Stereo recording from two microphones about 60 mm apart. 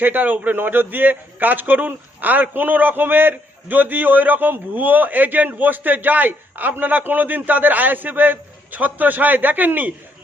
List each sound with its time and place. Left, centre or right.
0.0 s a man's voice: right